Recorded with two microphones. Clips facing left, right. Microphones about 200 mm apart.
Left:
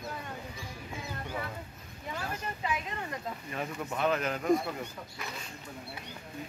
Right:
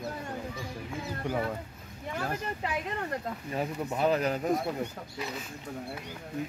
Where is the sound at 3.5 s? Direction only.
30° right (ahead or behind).